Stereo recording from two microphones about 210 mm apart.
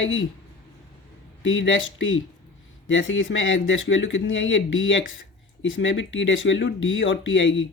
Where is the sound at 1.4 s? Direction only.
65° left (ahead or behind).